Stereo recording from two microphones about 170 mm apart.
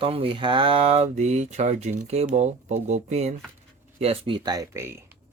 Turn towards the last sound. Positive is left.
turn(degrees=-15)  # may be behind; listen again after turning